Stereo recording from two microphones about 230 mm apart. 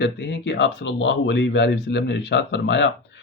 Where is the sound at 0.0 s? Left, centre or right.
Left.